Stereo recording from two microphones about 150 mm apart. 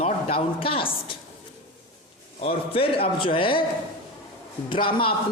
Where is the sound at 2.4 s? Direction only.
40° left (ahead or behind).